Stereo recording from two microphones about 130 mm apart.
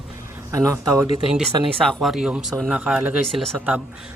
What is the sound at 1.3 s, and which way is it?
Speech, centre (ahead or behind).